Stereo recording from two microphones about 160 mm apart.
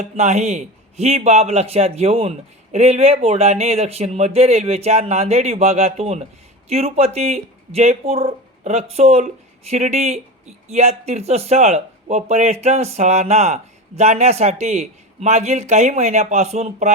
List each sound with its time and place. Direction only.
0.0 s speech: 45° right (ahead or behind)